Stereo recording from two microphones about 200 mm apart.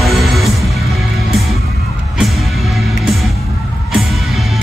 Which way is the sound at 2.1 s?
Centre (ahead or behind).